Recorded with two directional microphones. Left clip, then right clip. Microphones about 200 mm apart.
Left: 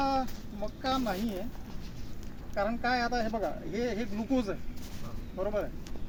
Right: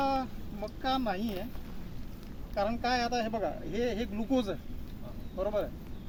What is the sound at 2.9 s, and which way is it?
Speech, 10° left (ahead or behind).